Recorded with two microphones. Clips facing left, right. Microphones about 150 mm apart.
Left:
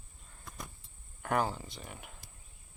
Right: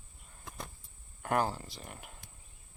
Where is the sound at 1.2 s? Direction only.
Centre (ahead or behind).